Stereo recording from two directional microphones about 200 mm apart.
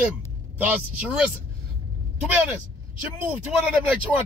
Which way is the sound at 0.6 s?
5° right (ahead or behind).